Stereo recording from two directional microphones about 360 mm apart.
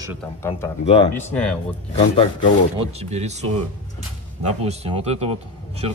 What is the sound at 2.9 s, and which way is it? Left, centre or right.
Speech, centre.